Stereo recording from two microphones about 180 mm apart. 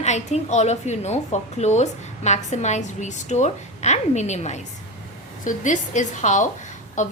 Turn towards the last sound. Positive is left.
turn(degrees=45)  # may be behind; listen again after turning